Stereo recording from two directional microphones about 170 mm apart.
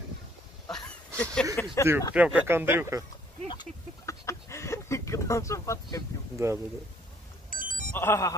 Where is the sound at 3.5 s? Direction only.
20° left (ahead or behind).